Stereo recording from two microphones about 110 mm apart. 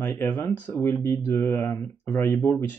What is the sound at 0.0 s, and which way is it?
Speech, 20° left (ahead or behind).